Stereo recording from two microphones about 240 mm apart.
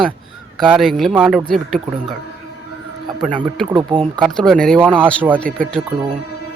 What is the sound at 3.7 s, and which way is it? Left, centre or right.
Speech, centre.